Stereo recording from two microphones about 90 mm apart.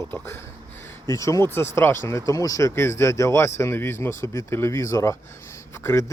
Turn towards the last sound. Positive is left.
turn(degrees=30)  # may be behind; listen again after turning